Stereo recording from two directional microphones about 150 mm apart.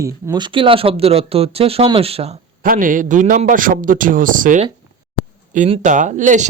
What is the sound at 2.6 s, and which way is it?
A man's voice, 65° right (ahead or behind).